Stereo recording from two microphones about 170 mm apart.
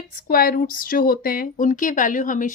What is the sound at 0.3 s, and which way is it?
Speech, 60° left (ahead or behind).